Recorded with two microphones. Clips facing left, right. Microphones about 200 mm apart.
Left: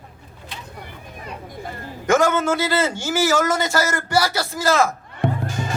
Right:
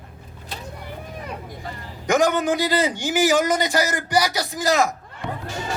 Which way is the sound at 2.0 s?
15° right (ahead or behind).